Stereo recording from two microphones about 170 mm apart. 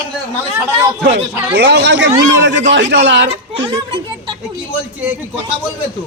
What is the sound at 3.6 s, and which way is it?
Speech, 30° right (ahead or behind).